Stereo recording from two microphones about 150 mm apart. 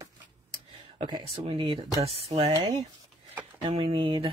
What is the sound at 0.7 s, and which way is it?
Speech, 35° right (ahead or behind).